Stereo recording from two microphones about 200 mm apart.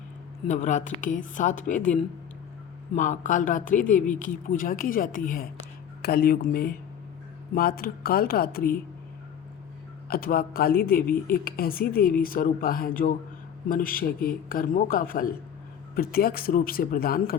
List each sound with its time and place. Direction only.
0.4 s a man's voice: 35° left (ahead or behind)
10.1 s a man's voice: 45° left (ahead or behind)